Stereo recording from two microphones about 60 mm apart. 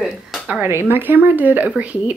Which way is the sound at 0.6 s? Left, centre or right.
Right.